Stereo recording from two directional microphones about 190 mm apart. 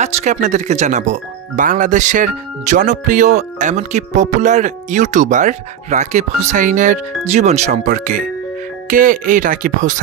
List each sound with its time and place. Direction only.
0.0 s speech: 40° right (ahead or behind)